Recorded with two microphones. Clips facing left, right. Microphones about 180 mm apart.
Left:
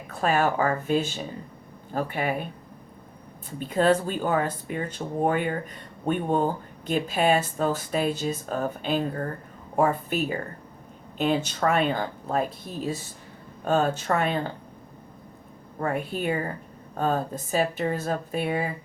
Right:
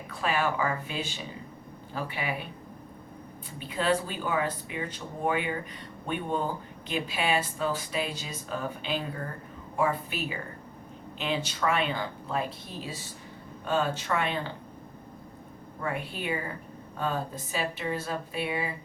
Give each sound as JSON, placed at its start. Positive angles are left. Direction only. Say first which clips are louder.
{"t": 0.1, "sound": "speech", "louder": "left 5 dB", "side_deg": 45}
{"t": 3.6, "sound": "speech", "louder": "left 6 dB", "side_deg": 45}
{"t": 15.8, "sound": "speech", "louder": "left 6 dB", "side_deg": 45}